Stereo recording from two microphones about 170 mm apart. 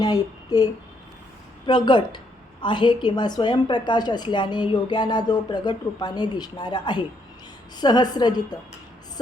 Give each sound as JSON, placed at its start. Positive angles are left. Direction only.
{"t": 0.0, "sound": "a woman's voice", "side_deg": 20}